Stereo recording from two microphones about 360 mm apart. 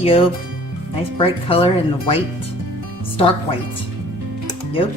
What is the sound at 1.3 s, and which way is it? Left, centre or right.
Speech, centre.